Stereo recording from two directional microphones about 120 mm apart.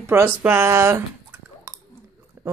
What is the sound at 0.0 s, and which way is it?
Speech, 20° right (ahead or behind).